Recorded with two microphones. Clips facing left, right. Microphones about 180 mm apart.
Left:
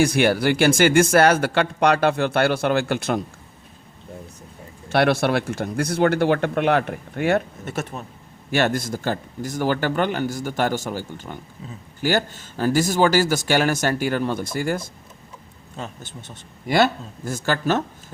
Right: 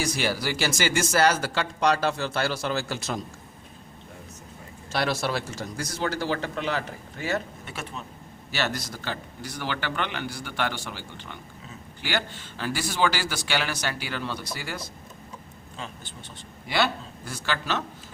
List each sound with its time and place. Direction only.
0.0 s speech: 55° left (ahead or behind)
4.9 s speech: 60° left (ahead or behind)
7.6 s a man's voice: 45° left (ahead or behind)